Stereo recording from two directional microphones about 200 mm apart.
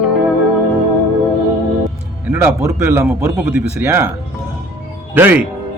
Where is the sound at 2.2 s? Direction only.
10° right (ahead or behind).